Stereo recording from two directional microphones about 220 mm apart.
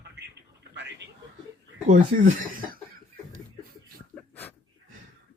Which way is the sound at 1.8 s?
35° right (ahead or behind).